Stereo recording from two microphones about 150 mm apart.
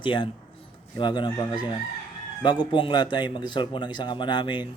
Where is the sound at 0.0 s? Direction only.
35° left (ahead or behind).